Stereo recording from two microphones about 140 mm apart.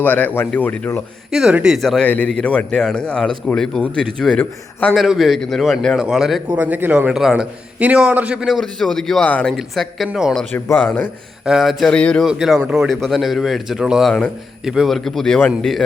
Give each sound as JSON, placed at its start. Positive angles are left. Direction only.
{"t": 0.0, "sound": "speech", "side_deg": 10}
{"t": 1.3, "sound": "a man's voice", "side_deg": -5}
{"t": 4.9, "sound": "a man's voice", "side_deg": 0}
{"t": 6.6, "sound": "speech", "side_deg": -15}
{"t": 7.1, "sound": "a man's voice", "side_deg": -5}
{"t": 10.5, "sound": "speech", "side_deg": 15}
{"t": 11.4, "sound": "a man's voice", "side_deg": 0}